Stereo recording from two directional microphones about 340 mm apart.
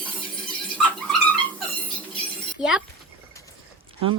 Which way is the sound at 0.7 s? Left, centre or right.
Centre.